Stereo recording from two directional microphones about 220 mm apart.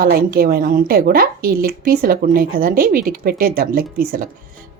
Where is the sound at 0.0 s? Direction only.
40° right (ahead or behind).